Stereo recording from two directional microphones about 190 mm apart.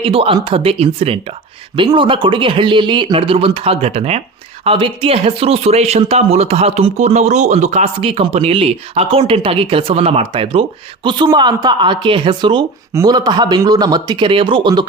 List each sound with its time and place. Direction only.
0.0 s speech: 30° right (ahead or behind)